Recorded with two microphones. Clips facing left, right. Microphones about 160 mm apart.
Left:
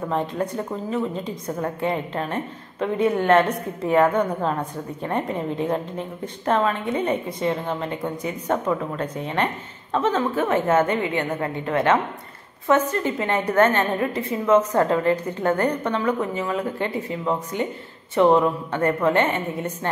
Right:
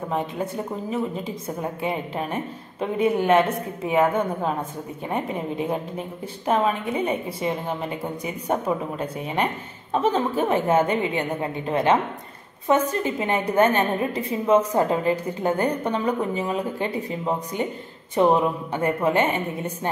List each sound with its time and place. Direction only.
0.1 s a woman's voice: 5° right (ahead or behind)
17.5 s speech: 20° left (ahead or behind)
18.1 s a woman's voice: 15° right (ahead or behind)